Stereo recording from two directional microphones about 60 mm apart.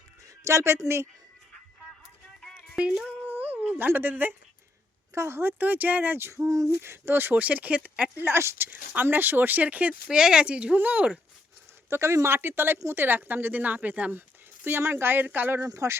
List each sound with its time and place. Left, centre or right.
0.4 s speech: right
2.6 s music: centre
3.2 s a sound: right
3.8 s speech: right
5.1 s speech: right
6.3 s a sound: right
6.8 s speech: right
7.4 s speech: right
8.2 s speech: right
10.1 s speech: centre
10.8 s speech: right
11.9 s speech: right
14.2 s speech: right
15.6 s a sound: right